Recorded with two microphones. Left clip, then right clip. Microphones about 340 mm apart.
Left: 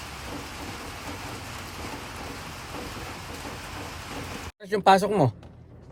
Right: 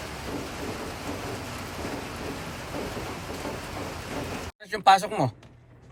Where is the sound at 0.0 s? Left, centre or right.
Centre.